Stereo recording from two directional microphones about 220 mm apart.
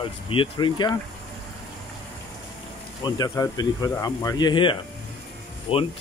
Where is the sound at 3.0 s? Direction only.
20° left (ahead or behind).